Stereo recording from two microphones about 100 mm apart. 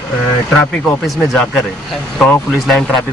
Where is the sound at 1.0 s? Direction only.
Centre (ahead or behind).